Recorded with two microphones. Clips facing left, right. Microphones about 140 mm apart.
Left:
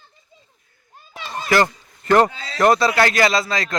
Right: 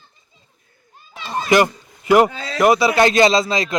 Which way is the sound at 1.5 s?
20° right (ahead or behind).